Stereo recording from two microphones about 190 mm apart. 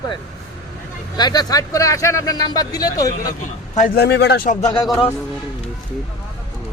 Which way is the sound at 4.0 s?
60° left (ahead or behind).